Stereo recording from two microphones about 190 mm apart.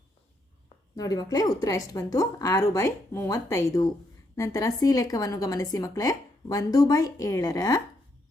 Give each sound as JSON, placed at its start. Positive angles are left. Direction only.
{"t": 0.9, "sound": "a woman's voice", "side_deg": 20}